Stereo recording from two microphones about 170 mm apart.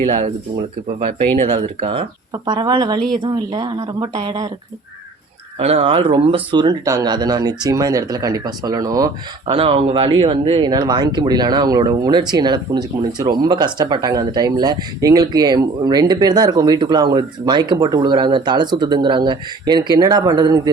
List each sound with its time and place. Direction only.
1.3 s speech: 30° right (ahead or behind)
5.5 s speech: 35° right (ahead or behind)
9.6 s speech: 35° right (ahead or behind)